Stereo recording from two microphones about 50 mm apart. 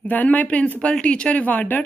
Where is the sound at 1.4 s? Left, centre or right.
Left.